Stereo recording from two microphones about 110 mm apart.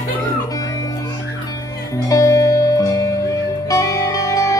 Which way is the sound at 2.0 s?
30° left (ahead or behind).